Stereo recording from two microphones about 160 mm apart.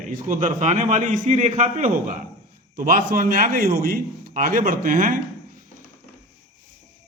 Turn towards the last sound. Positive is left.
turn(degrees=-60)  # may be behind; listen again after turning